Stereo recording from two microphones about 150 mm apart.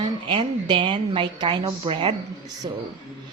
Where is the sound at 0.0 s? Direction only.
30° right (ahead or behind).